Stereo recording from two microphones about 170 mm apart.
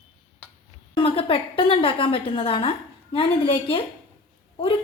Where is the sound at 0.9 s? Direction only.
30° left (ahead or behind).